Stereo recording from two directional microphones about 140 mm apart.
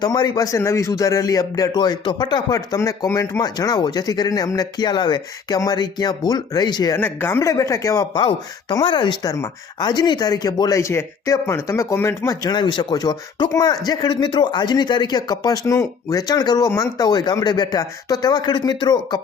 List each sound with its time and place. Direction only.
0.0 s speech: 30° left (ahead or behind)
6.9 s speech: 15° left (ahead or behind); by 19.2 s 30° left (ahead or behind)